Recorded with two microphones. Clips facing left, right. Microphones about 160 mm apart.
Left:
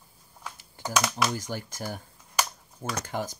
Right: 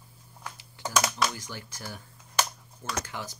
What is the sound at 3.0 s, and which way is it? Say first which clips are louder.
Speech: left 7 dB; 50° left (ahead or behind).